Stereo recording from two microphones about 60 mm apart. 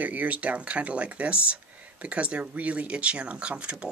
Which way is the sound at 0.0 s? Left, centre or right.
Right.